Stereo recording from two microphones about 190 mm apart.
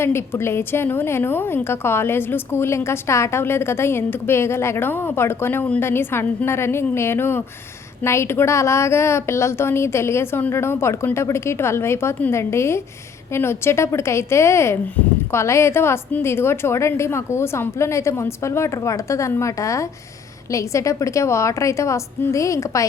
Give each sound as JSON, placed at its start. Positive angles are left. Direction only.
{"t": 0.0, "sound": "a woman's voice", "side_deg": 15}